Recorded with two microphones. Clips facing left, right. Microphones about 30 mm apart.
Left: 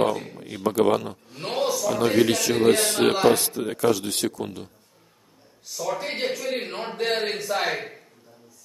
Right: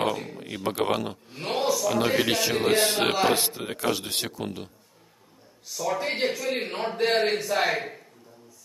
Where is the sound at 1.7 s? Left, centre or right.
Centre.